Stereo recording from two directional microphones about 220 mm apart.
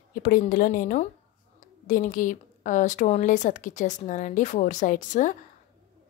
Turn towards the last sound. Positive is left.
turn(degrees=35)  # may be behind; listen again after turning